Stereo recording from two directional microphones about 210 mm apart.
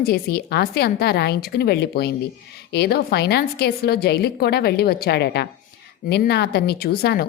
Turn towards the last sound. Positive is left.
turn(degrees=50)  # may be behind; listen again after turning